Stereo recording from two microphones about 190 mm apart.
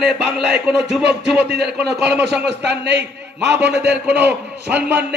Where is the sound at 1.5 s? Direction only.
60° right (ahead or behind).